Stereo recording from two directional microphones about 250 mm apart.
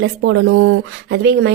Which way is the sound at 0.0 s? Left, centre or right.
Right.